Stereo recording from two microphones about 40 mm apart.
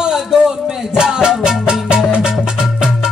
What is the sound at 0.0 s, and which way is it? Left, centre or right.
Music, centre.